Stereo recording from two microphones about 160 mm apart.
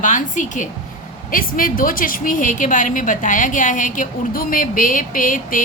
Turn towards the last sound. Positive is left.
turn(degrees=55)  # may be behind; listen again after turning